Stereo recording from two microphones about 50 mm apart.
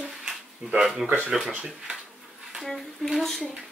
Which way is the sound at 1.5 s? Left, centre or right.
Centre.